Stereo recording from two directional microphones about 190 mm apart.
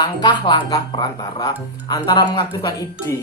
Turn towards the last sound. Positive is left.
turn(degrees=20)  # may be behind; listen again after turning